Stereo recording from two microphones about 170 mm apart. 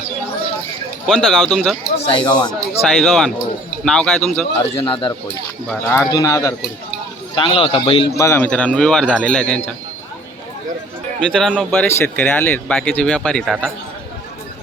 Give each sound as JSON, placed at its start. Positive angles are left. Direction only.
{"t": 1.0, "sound": "speech", "side_deg": 0}
{"t": 2.0, "sound": "speech", "side_deg": 25}
{"t": 2.5, "sound": "speech", "side_deg": 0}
{"t": 4.6, "sound": "a man's voice", "side_deg": 35}
{"t": 5.6, "sound": "a man's voice", "side_deg": 15}
{"t": 8.2, "sound": "speech", "side_deg": 10}
{"t": 11.2, "sound": "speech", "side_deg": 5}